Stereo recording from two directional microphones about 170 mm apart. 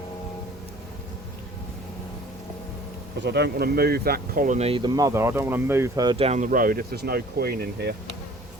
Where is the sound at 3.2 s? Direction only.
75° right (ahead or behind); by 6.1 s 20° right (ahead or behind).